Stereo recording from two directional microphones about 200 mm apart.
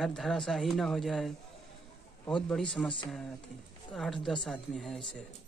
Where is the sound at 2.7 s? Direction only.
Centre (ahead or behind).